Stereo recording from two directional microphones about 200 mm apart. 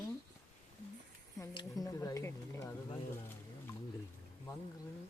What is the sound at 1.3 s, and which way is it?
Speech, 20° left (ahead or behind).